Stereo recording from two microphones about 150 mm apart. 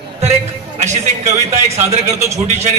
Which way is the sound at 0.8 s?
50° right (ahead or behind).